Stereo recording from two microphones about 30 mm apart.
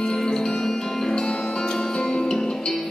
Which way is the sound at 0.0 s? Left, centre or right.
Left.